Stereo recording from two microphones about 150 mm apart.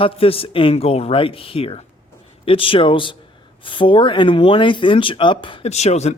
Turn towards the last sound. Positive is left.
turn(degrees=45)  # may be behind; listen again after turning